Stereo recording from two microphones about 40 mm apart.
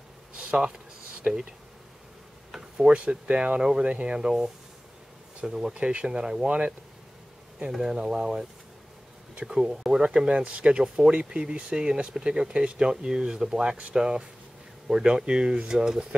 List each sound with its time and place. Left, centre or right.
1.3 s speech: right
2.8 s speech: right
5.5 s speech: centre
7.7 s speech: centre
9.5 s speech: centre